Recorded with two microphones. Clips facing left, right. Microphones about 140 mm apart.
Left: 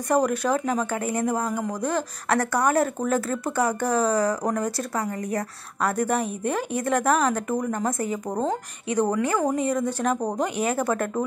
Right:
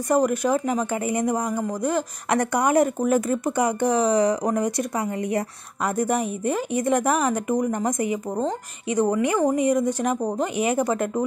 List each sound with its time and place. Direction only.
0.1 s speech: 10° right (ahead or behind)